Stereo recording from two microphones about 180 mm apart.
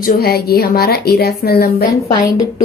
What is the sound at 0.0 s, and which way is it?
Speech, 60° left (ahead or behind).